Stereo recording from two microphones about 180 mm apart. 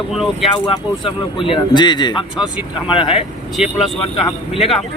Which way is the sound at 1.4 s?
25° left (ahead or behind).